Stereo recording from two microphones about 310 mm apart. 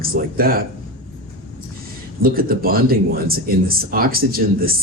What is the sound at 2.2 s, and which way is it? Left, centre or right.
Speech, right.